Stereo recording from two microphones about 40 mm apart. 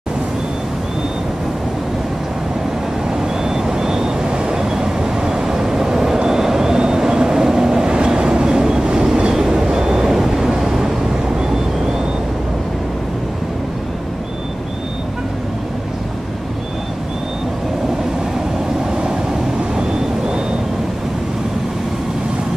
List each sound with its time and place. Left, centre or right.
3.2 s vehicle: centre
19.8 s vehicle: centre